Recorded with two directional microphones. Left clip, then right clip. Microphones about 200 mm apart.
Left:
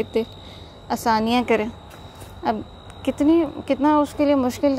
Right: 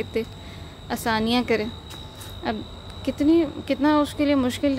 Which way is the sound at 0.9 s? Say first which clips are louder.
Left 5 dB; 10° left (ahead or behind).